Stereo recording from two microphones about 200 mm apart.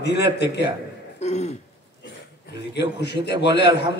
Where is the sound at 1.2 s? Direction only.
35° left (ahead or behind).